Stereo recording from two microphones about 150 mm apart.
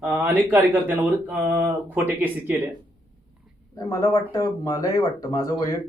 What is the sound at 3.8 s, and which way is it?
Speech, 20° left (ahead or behind).